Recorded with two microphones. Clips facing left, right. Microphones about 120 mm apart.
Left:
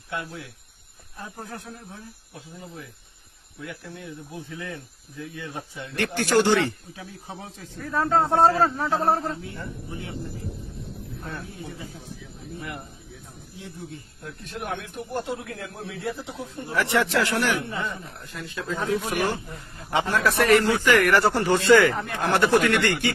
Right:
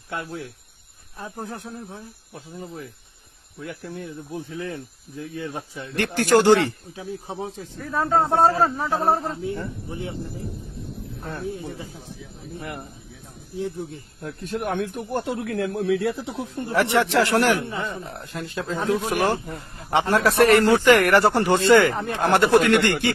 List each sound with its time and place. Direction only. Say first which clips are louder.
0.1 s speech: right 2 dB; 40° right (ahead or behind)
1.2 s speech: right 4 dB; 25° right (ahead or behind)
4.5 s speech: right 5 dB; 35° right (ahead or behind)
7.8 s speech: right 1 dB; 5° right (ahead or behind)
9.2 s speech: right 4 dB; 25° right (ahead or behind)
11.2 s speech: right 7 dB; 30° right (ahead or behind)
14.5 s speech: right 7 dB; 45° right (ahead or behind)
15.2 s speech: right 7 dB; 65° right (ahead or behind)
16.7 s speech: right 3 dB; 30° right (ahead or behind)